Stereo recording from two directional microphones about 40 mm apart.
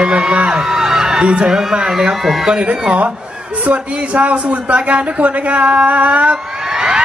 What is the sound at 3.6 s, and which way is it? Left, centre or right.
A man's voice, right.